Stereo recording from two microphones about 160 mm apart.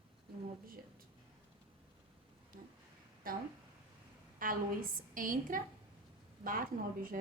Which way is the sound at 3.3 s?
60° right (ahead or behind).